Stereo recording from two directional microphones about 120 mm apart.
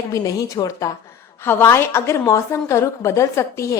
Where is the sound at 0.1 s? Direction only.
30° left (ahead or behind).